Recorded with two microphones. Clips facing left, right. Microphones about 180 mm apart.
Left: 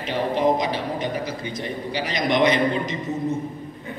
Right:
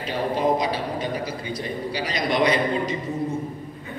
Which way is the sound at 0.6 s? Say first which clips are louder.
Even; 20° left (ahead or behind).